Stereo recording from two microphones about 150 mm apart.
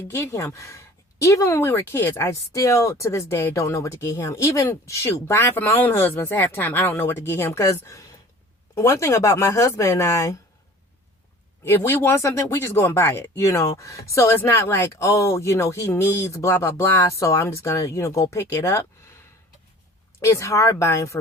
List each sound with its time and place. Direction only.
0.1 s speech: 20° left (ahead or behind)
11.6 s speech: 15° left (ahead or behind)
20.1 s speech: 20° left (ahead or behind)